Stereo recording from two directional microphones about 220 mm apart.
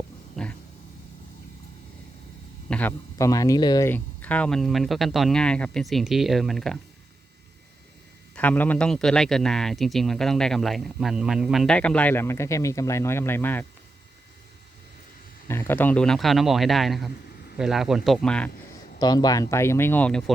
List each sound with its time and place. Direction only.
0.4 s roaring cats: centre (ahead or behind)
2.6 s a man's voice: 5° left (ahead or behind)
8.4 s a man's voice: 5° left (ahead or behind)
15.4 s a man's voice: 10° left (ahead or behind)
18.9 s speech: 20° left (ahead or behind)